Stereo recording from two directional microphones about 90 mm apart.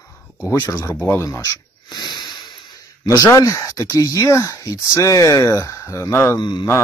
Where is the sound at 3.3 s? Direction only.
35° left (ahead or behind).